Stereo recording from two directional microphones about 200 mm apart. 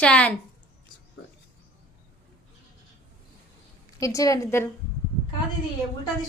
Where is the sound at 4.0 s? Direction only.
15° left (ahead or behind).